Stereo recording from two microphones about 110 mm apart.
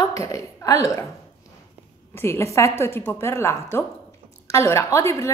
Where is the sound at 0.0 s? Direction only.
30° left (ahead or behind).